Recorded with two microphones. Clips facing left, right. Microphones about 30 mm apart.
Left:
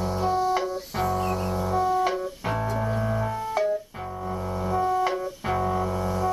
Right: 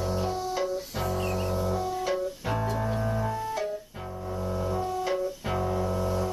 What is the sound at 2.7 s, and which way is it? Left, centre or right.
Music, centre.